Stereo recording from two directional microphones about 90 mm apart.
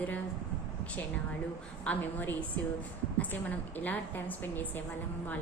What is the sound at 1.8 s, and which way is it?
A woman's voice, 20° left (ahead or behind).